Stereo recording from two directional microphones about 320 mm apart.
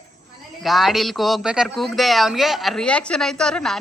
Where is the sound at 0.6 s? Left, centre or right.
Centre.